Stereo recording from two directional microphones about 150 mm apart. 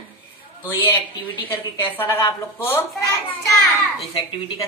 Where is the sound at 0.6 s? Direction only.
15° left (ahead or behind).